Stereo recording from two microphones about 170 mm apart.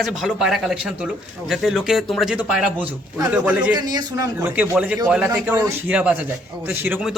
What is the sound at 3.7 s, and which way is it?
Speech, 25° right (ahead or behind).